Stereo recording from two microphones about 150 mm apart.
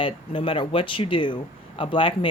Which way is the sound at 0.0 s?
35° left (ahead or behind).